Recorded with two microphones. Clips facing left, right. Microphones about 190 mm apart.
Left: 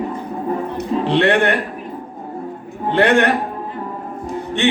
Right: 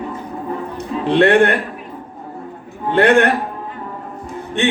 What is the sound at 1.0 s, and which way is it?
Speech, 55° right (ahead or behind).